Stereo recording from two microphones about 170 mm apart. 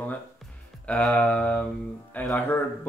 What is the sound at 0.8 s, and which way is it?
Speech, 10° left (ahead or behind).